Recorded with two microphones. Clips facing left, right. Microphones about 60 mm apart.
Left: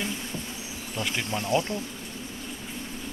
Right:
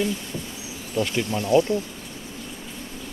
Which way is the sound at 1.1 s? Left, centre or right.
Centre.